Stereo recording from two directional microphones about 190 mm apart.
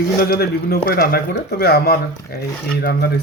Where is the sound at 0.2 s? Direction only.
55° left (ahead or behind).